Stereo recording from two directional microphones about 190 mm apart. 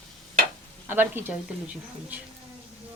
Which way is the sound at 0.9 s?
10° right (ahead or behind).